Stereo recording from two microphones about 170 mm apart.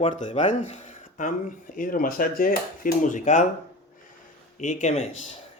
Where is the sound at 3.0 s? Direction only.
45° left (ahead or behind).